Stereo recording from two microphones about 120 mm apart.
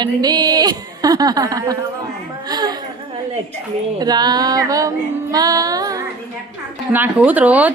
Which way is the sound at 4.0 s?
35° right (ahead or behind).